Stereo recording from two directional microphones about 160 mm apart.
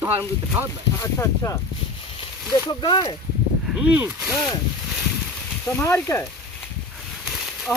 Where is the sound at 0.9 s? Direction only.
20° left (ahead or behind).